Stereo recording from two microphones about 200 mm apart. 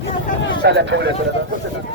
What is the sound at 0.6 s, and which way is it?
Speech, 60° right (ahead or behind).